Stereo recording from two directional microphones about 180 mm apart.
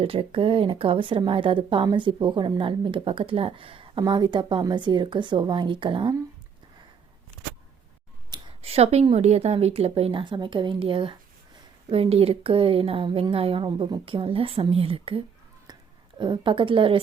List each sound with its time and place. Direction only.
0.0 s speech: 30° right (ahead or behind)
8.3 s a woman's voice: 30° right (ahead or behind)